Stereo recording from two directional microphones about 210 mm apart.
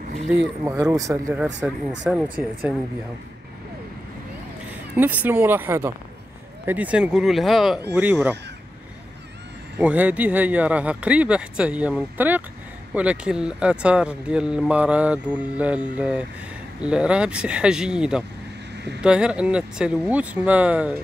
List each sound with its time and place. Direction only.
0.7 s speech: 15° right (ahead or behind)
4.9 s speech: 10° right (ahead or behind)
9.8 s speech: 10° right (ahead or behind)